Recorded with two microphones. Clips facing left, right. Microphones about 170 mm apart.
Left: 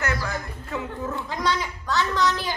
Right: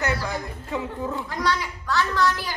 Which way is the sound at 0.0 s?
30° right (ahead or behind).